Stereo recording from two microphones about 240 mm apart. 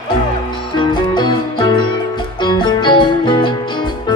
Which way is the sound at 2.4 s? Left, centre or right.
Centre.